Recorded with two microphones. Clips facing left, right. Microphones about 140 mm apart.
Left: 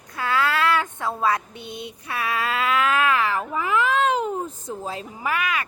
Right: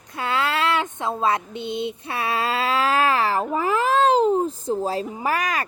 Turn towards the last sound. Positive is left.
turn(degrees=-40)  # may be behind; listen again after turning